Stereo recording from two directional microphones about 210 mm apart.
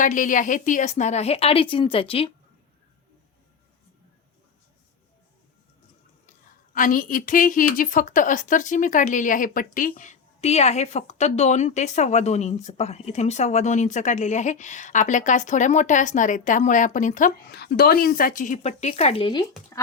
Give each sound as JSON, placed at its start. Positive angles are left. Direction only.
{"t": 0.0, "sound": "a woman's voice", "side_deg": 40}
{"t": 6.7, "sound": "a woman's voice", "side_deg": 40}